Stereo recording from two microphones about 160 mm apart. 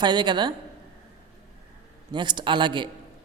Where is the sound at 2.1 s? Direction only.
30° right (ahead or behind).